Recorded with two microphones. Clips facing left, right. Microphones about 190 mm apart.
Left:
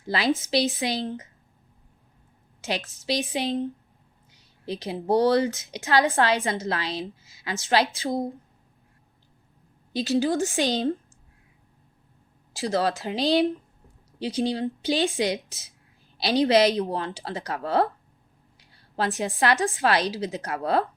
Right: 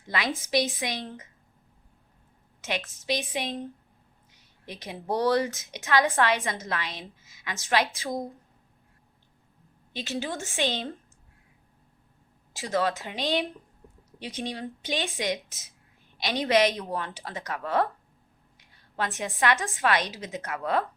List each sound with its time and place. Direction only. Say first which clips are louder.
0.1 s speech: left 3 dB; 30° left (ahead or behind)
2.6 s speech: left 3 dB; 30° left (ahead or behind)
9.9 s speech: left 9 dB; 35° left (ahead or behind)
12.5 s speech: left 2 dB; 35° left (ahead or behind)